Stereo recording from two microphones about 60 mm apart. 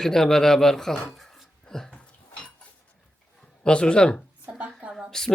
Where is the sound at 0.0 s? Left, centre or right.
Centre.